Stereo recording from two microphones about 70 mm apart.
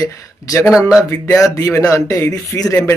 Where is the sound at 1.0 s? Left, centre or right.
Left.